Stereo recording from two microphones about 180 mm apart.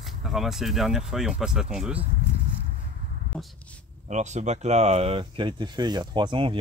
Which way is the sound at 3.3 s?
5° left (ahead or behind).